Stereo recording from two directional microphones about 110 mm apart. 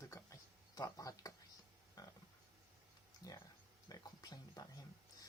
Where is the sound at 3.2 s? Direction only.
35° left (ahead or behind).